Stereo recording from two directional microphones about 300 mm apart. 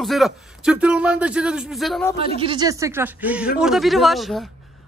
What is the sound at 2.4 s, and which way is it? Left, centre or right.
A man's voice, centre.